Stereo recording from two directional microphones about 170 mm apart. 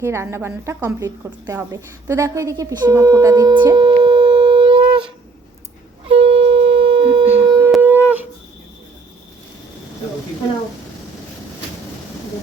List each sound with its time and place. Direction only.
0.0 s a woman's voice: 15° right (ahead or behind)
3.6 s wind instrument: 25° right (ahead or behind)
6.1 s shofar: 35° right (ahead or behind)
7.3 s wind instrument: 15° right (ahead or behind)
7.8 s shofar: 10° right (ahead or behind)